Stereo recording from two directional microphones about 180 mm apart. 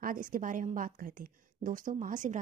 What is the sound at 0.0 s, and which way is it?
A woman's voice, 50° right (ahead or behind).